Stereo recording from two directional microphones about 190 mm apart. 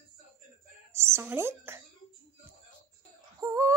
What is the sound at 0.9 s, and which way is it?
Speech, 15° right (ahead or behind).